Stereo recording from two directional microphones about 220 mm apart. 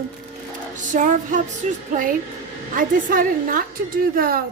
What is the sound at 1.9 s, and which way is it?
A woman's voice, 35° right (ahead or behind).